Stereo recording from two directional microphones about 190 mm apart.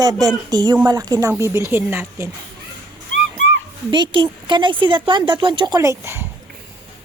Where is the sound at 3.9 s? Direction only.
25° right (ahead or behind).